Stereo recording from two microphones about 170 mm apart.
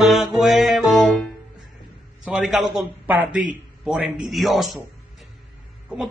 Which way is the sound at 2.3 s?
5° right (ahead or behind).